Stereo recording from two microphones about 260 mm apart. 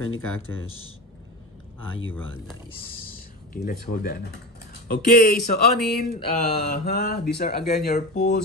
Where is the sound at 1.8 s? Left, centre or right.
Left.